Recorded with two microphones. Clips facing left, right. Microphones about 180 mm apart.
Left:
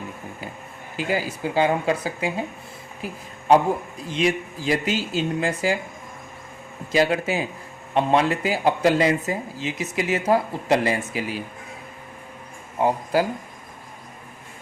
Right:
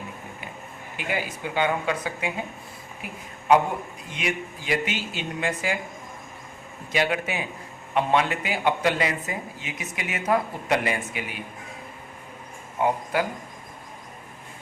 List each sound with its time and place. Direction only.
0.9 s speech: 35° left (ahead or behind)
4.0 s speech: 30° left (ahead or behind)
6.9 s speech: 35° left (ahead or behind)
12.8 s speech: 30° left (ahead or behind)